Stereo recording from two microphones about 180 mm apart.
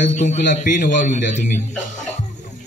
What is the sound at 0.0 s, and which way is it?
A man's voice, 40° left (ahead or behind).